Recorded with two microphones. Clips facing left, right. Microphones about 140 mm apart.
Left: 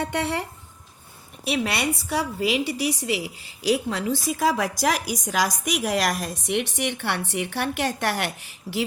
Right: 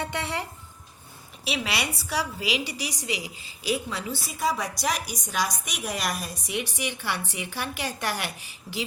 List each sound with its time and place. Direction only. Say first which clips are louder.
0.0 s speech: left 5 dB; 65° left (ahead or behind)
1.5 s a woman's voice: left 5 dB; 50° left (ahead or behind); by 4.0 s 70° left (ahead or behind)
4.3 s a woman's voice: left 4 dB; 90° left; by 8.3 s 70° left (ahead or behind)